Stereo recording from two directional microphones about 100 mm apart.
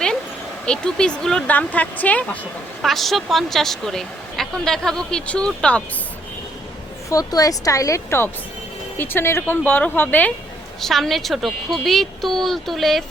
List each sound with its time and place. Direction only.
0.6 s speech: 10° left (ahead or behind)
2.8 s speech: centre (ahead or behind)
7.1 s a woman's voice: 35° left (ahead or behind); by 10.3 s 15° left (ahead or behind)
10.8 s speech: centre (ahead or behind)